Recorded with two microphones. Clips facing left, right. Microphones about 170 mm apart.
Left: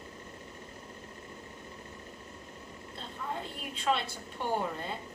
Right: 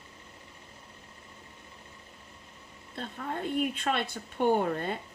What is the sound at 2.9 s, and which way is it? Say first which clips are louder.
A woman's voice: right 4 dB; 55° right (ahead or behind).